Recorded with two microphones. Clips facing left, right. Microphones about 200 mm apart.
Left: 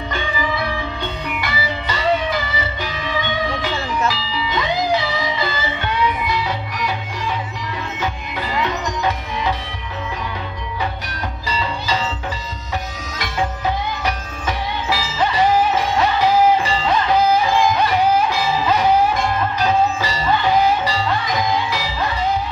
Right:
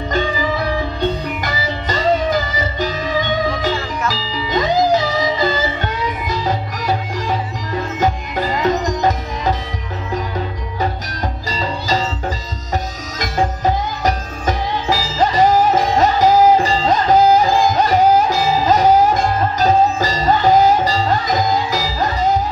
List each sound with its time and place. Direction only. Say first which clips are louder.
0.1 s music: right 5 dB; 40° right (ahead or behind)
11.4 s music: even; 40° right (ahead or behind)
13.2 s music: right 4 dB; 40° right (ahead or behind)